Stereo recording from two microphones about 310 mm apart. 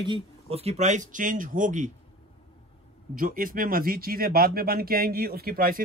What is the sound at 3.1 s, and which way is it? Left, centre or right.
Speech, right.